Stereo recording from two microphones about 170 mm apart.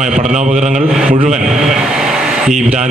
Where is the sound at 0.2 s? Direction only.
45° right (ahead or behind).